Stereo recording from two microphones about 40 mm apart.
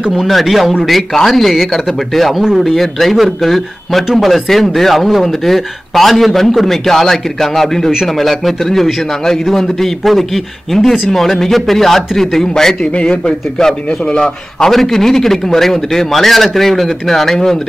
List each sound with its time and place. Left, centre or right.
0.3 s a man's voice: centre
12.8 s speech: left
14.7 s a man's voice: centre